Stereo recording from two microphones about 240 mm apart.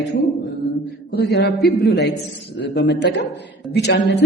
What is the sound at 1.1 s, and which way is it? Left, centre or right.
A man's voice, left.